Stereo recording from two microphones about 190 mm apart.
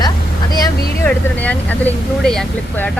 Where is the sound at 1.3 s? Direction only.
10° left (ahead or behind).